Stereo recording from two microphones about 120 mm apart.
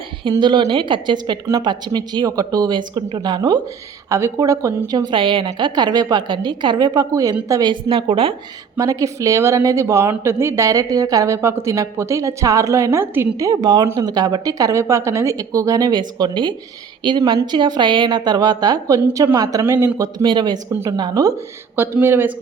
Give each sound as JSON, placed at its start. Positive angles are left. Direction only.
{"t": 0.3, "sound": "a woman's voice", "side_deg": -40}
{"t": 4.1, "sound": "a woman's voice", "side_deg": -25}
{"t": 5.1, "sound": "a woman's voice", "side_deg": -45}
{"t": 7.7, "sound": "a woman's voice", "side_deg": -45}
{"t": 8.8, "sound": "a woman's voice", "side_deg": -30}
{"t": 20.0, "sound": "a woman's voice", "side_deg": -35}
{"t": 20.7, "sound": "a woman's voice", "side_deg": -25}
{"t": 21.8, "sound": "a woman's voice", "side_deg": -20}